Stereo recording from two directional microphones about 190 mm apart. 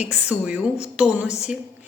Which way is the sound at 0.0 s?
5° right (ahead or behind).